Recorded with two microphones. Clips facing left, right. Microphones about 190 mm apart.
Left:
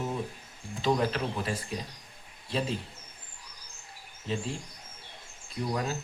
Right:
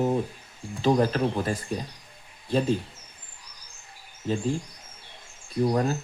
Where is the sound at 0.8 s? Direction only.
40° right (ahead or behind).